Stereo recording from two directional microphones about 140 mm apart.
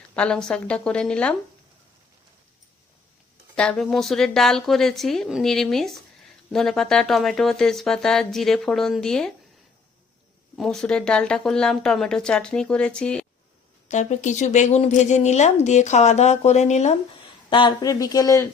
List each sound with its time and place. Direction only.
0.2 s a woman's voice: 5° left (ahead or behind)
3.5 s a woman's voice: 5° left (ahead or behind)
10.6 s a woman's voice: 5° left (ahead or behind)
13.8 s speech: 55° left (ahead or behind)
17.5 s speech: 35° left (ahead or behind)